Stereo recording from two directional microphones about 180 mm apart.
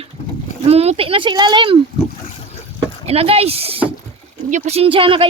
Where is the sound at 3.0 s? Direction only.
35° right (ahead or behind).